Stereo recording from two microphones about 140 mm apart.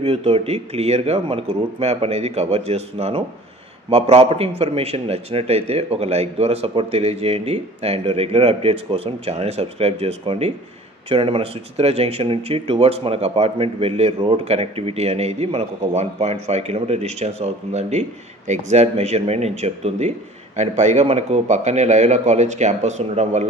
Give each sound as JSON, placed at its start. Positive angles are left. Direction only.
{"t": 0.0, "sound": "a man's voice", "side_deg": -45}